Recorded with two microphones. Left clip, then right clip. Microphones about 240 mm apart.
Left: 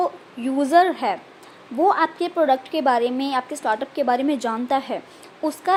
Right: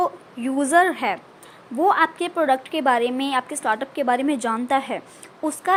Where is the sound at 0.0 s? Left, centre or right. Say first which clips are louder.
Even; centre.